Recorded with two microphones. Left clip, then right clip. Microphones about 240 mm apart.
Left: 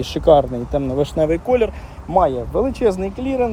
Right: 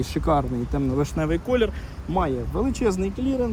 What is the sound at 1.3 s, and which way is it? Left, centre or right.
Speech, centre.